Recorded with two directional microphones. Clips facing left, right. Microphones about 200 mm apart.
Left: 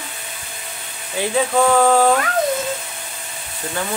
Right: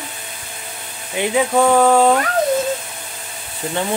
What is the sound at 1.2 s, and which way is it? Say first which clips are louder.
Speech: right 2 dB; 15° right (ahead or behind).